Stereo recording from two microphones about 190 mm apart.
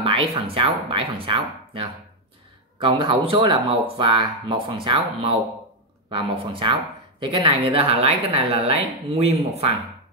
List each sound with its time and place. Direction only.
0.0 s speech: 30° right (ahead or behind)